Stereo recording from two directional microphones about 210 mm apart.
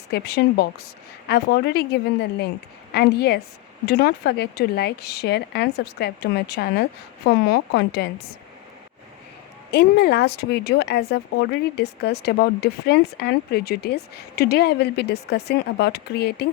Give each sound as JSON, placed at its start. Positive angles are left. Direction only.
{"t": 0.1, "sound": "speech", "side_deg": 50}
{"t": 9.7, "sound": "speech", "side_deg": 50}